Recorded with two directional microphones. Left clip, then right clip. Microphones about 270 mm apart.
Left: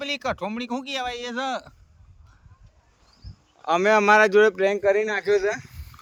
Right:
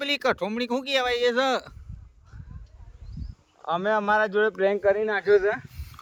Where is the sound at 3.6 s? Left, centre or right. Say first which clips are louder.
Left 6 dB; left.